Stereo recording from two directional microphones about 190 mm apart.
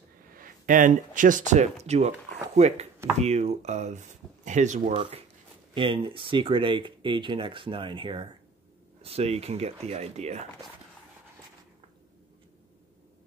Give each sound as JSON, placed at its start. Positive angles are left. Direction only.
{"t": 0.4, "sound": "speech", "side_deg": -45}